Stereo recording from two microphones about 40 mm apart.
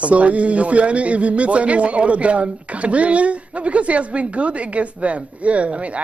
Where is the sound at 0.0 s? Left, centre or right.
Right.